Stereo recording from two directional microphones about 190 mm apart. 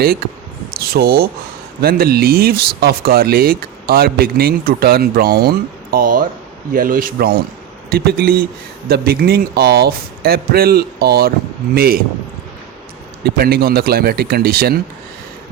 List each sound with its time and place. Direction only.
0.8 s a man's voice: 55° right (ahead or behind)
13.2 s speech: 55° right (ahead or behind)